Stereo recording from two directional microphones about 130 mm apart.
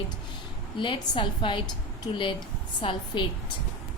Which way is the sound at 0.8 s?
40° left (ahead or behind).